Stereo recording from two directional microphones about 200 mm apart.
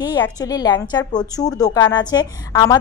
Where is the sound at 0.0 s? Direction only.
20° left (ahead or behind).